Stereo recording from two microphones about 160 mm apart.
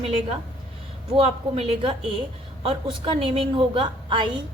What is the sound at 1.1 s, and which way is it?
Speech, 35° right (ahead or behind).